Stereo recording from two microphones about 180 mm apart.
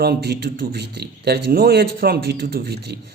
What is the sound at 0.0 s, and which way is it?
Speech, 60° right (ahead or behind).